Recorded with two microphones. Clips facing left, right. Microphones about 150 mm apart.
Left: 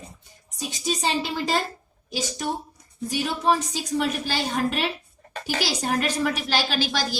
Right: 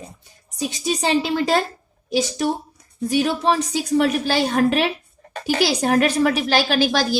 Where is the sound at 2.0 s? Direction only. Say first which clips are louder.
Right 8 dB; 65° right (ahead or behind).